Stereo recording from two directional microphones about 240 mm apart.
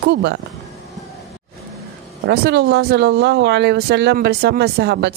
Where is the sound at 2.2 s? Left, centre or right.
Right.